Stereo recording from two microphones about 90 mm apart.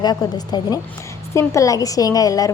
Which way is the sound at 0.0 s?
50° left (ahead or behind).